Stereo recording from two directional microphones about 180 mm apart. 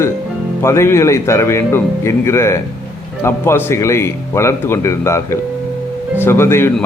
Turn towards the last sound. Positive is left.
turn(degrees=15)  # may be behind; listen again after turning